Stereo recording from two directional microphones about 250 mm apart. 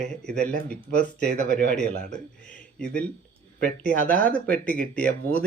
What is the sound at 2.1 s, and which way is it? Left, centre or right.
Speech, centre.